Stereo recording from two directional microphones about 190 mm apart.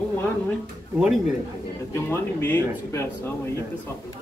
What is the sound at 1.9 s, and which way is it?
A man's voice, 10° left (ahead or behind).